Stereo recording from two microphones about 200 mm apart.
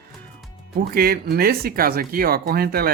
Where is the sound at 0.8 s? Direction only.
50° right (ahead or behind).